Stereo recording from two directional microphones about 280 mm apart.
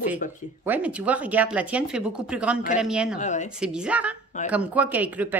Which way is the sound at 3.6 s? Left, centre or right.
Centre.